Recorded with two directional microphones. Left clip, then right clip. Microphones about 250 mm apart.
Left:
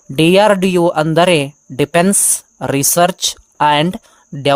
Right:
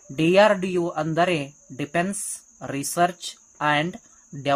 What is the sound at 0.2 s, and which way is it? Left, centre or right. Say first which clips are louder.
Speech: left 7 dB; left.